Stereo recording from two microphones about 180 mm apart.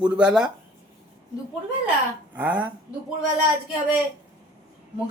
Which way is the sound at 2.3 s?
10° right (ahead or behind).